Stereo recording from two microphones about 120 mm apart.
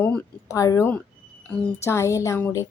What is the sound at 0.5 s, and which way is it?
A woman's voice, 25° left (ahead or behind).